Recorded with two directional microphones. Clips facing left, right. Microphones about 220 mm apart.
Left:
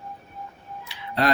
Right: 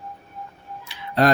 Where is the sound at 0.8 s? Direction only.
45° right (ahead or behind).